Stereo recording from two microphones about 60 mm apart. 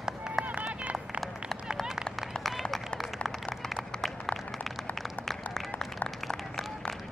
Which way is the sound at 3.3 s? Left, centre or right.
Centre.